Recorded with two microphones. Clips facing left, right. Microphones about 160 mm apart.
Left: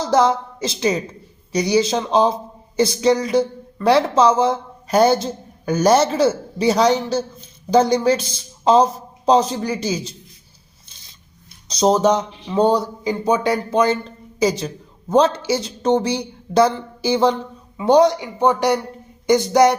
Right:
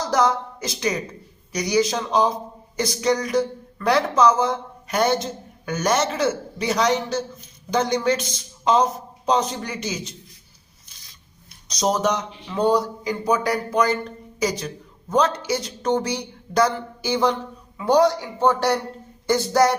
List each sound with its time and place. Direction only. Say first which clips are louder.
0.0 s a woman's voice: left 4 dB; 25° left (ahead or behind)
10.8 s filing: left 2 dB; 25° left (ahead or behind)
11.7 s a man's voice: left 6 dB; 30° left (ahead or behind)